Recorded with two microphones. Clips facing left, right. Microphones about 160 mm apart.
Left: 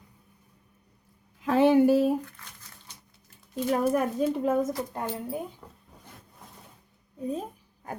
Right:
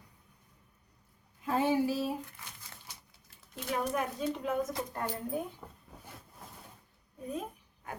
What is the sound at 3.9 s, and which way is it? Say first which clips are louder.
Speech: left 8 dB; 45° left (ahead or behind).